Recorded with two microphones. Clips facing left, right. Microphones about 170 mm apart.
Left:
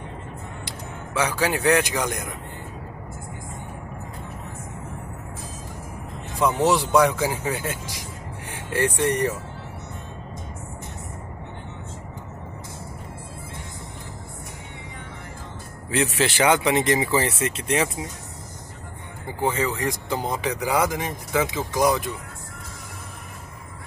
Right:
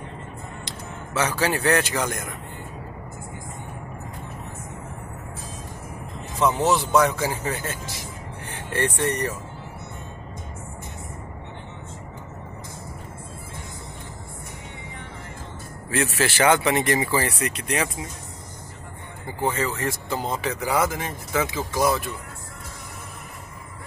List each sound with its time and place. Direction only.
0.7 s music: 10° left (ahead or behind)
1.4 s speech: 15° left (ahead or behind)
6.4 s speech: 15° left (ahead or behind)
15.9 s speech: 20° left (ahead or behind)
19.4 s speech: 15° left (ahead or behind)